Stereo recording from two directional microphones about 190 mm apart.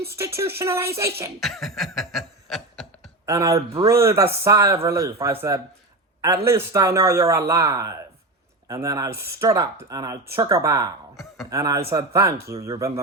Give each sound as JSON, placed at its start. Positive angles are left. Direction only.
{"t": 0.6, "sound": "speech", "side_deg": -15}
{"t": 1.4, "sound": "snicker", "side_deg": 0}
{"t": 3.2, "sound": "speech", "side_deg": -15}